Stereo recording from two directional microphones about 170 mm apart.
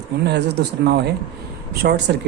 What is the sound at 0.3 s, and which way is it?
Speech, 80° right.